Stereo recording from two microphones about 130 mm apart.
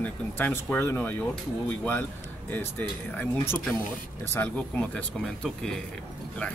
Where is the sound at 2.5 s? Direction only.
15° left (ahead or behind).